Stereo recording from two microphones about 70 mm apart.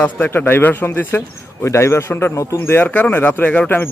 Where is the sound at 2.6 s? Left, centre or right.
Left.